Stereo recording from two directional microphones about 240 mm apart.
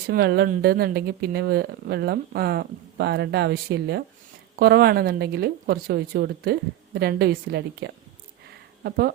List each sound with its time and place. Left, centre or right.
0.1 s speech: right